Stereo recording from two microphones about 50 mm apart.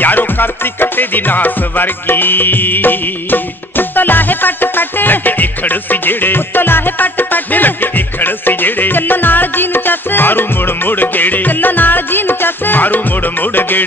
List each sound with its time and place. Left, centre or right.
0.0 s music: left